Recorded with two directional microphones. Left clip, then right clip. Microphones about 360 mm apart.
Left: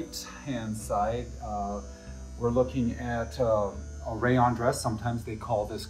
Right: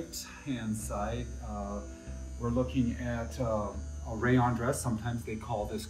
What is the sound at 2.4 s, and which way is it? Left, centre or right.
Speech, left.